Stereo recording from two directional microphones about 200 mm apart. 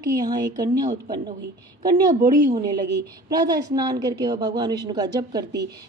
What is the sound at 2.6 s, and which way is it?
A woman's voice, 20° right (ahead or behind).